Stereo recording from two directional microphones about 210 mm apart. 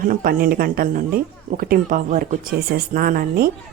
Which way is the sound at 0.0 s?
40° right (ahead or behind).